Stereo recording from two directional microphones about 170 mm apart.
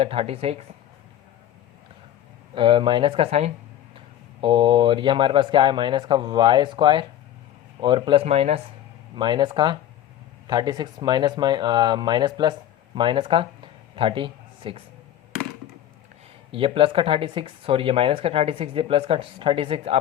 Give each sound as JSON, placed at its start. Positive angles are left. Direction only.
{"t": 0.0, "sound": "speech", "side_deg": -35}
{"t": 2.6, "sound": "speech", "side_deg": -30}
{"t": 9.1, "sound": "a man's voice", "side_deg": -25}
{"t": 16.5, "sound": "speech", "side_deg": -30}